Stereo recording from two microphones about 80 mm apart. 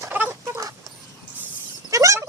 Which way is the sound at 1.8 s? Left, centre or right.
Right.